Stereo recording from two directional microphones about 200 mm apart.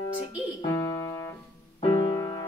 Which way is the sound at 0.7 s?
15° left (ahead or behind).